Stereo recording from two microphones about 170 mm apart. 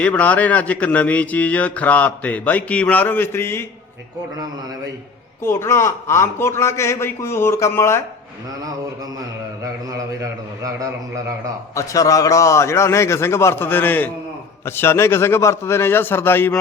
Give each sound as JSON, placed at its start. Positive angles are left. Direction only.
{"t": 0.0, "sound": "a man's voice", "side_deg": 10}
{"t": 5.4, "sound": "a man's voice", "side_deg": 15}
{"t": 11.7, "sound": "a man's voice", "side_deg": 20}